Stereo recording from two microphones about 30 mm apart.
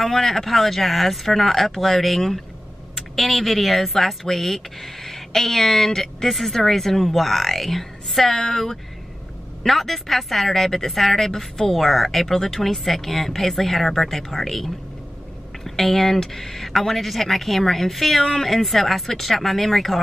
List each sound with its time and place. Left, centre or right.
0.0 s speech: centre
9.6 s speech: centre
18.2 s speech: centre
18.5 s speech: centre